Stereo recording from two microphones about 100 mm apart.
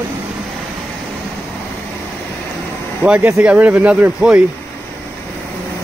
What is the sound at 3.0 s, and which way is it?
Speech, 20° right (ahead or behind).